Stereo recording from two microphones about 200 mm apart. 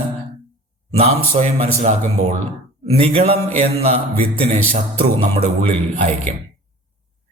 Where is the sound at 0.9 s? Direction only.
30° right (ahead or behind).